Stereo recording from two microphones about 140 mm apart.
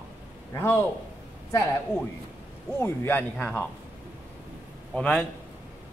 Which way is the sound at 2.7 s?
15° left (ahead or behind).